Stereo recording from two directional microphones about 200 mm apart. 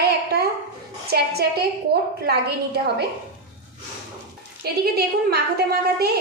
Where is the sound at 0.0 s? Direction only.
50° right (ahead or behind).